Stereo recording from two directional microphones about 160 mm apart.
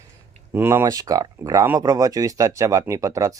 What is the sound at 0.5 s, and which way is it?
Speech, 15° right (ahead or behind).